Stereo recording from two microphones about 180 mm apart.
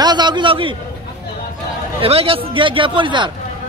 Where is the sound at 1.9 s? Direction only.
30° right (ahead or behind).